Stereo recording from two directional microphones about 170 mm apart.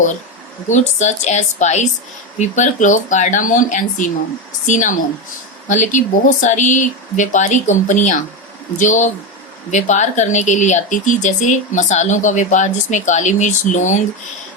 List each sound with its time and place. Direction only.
0.7 s speech: 45° left (ahead or behind)